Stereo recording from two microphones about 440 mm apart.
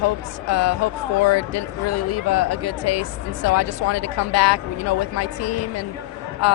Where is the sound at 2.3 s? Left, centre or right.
Left.